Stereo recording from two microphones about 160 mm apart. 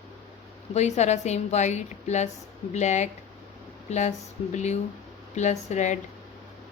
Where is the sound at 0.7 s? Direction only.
45° left (ahead or behind).